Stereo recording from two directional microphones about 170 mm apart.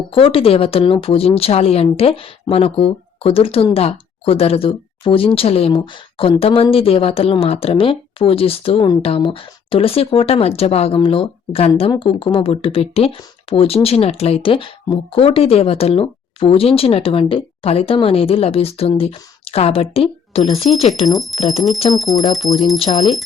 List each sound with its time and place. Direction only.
0.1 s speech: 30° left (ahead or behind)
21.1 s speech: centre (ahead or behind)
22.8 s speech: 45° left (ahead or behind)